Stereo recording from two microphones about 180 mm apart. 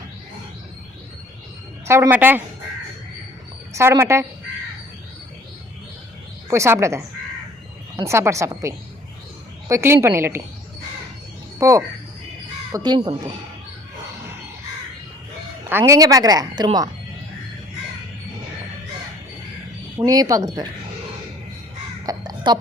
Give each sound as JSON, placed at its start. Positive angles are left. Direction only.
{"t": 1.9, "sound": "a woman's voice", "side_deg": -10}
{"t": 3.8, "sound": "a woman's voice", "side_deg": -15}
{"t": 6.5, "sound": "a woman's voice", "side_deg": -15}
{"t": 11.6, "sound": "a woman's voice", "side_deg": -15}
{"t": 15.8, "sound": "a woman's voice", "side_deg": -20}
{"t": 20.1, "sound": "a woman's voice", "side_deg": -20}
{"t": 22.0, "sound": "crow", "side_deg": -25}